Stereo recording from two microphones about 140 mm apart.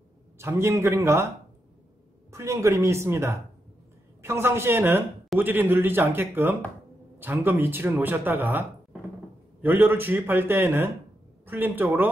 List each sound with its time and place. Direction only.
0.4 s speech: 20° right (ahead or behind)
2.3 s speech: 20° right (ahead or behind)